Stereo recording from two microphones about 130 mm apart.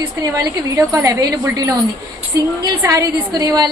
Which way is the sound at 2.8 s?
25° right (ahead or behind).